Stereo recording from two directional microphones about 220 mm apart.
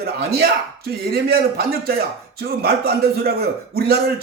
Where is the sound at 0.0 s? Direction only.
45° right (ahead or behind).